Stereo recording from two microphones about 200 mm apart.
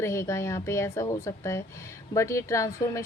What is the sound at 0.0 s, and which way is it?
A woman's voice, 15° left (ahead or behind).